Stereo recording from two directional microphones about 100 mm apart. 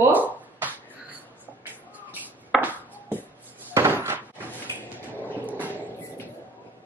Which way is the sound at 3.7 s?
25° right (ahead or behind).